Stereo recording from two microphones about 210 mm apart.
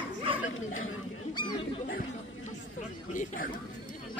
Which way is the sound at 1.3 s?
20° left (ahead or behind).